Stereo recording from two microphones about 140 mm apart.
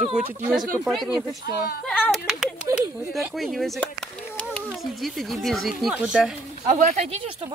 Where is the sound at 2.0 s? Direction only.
5° right (ahead or behind).